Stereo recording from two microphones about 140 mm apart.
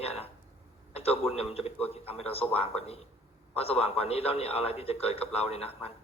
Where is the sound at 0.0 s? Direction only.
45° left (ahead or behind).